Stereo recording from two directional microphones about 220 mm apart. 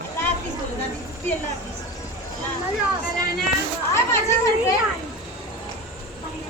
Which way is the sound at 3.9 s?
10° left (ahead or behind).